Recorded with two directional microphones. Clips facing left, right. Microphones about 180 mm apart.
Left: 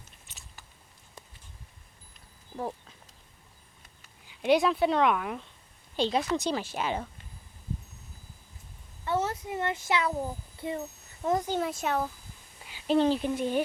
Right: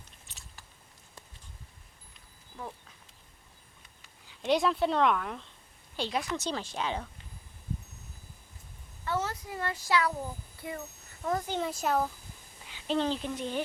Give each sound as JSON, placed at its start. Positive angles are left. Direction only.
{"t": 0.3, "sound": "biting", "side_deg": 0}
{"t": 4.3, "sound": "a woman's voice", "side_deg": 5}
{"t": 6.0, "sound": "speech", "side_deg": 25}
{"t": 6.3, "sound": "a woman's voice", "side_deg": 10}
{"t": 9.0, "sound": "a child's voice", "side_deg": 25}
{"t": 11.6, "sound": "speech", "side_deg": 0}
{"t": 12.9, "sound": "a woman's voice", "side_deg": 10}